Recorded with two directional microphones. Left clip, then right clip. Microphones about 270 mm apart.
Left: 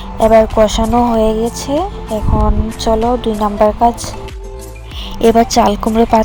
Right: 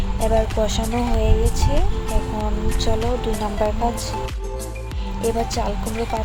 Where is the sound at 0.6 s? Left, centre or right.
Left.